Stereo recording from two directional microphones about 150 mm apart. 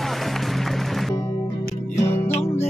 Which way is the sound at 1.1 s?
20° left (ahead or behind).